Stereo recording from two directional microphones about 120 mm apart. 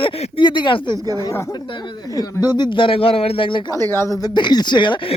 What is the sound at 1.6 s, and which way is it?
Speech, 40° left (ahead or behind).